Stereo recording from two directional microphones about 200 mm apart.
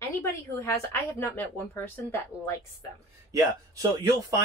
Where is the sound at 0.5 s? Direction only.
15° left (ahead or behind).